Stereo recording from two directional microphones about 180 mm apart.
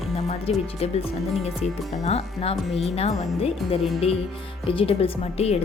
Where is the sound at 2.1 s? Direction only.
35° left (ahead or behind).